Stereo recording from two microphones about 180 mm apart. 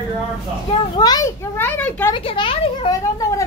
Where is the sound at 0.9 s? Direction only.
20° left (ahead or behind).